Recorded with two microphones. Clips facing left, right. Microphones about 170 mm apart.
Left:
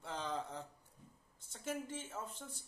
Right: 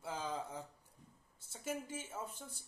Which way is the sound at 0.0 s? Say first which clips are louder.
Even; 5° right (ahead or behind).